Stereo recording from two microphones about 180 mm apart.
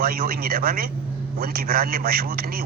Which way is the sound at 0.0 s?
55° right (ahead or behind).